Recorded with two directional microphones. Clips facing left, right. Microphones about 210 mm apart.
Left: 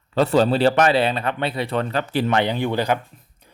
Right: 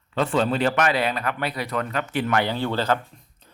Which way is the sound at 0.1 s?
35° left (ahead or behind).